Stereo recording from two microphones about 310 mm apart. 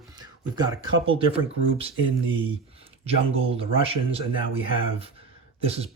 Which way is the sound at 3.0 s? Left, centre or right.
Centre.